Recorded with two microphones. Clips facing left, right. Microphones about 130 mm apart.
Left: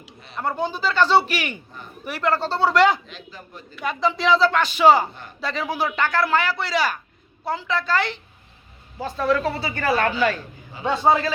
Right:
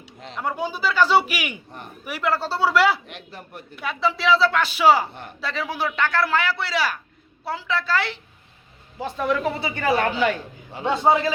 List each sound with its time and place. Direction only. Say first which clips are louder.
0.4 s speech: left 1 dB; 10° right (ahead or behind)
1.7 s a man's voice: right 2 dB; 70° right (ahead or behind)
2.0 s speech: left 2 dB; 10° right (ahead or behind)
3.1 s a man's voice: right 1 dB; 65° right (ahead or behind)
3.8 s a man's voice: left 1 dB; centre (ahead or behind)
9.0 s speech: left 2 dB; 15° right (ahead or behind)